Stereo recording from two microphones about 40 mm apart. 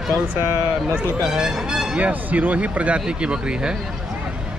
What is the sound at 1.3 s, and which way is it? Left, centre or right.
Speech, centre.